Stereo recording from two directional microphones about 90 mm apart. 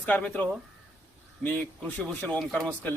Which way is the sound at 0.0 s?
20° left (ahead or behind).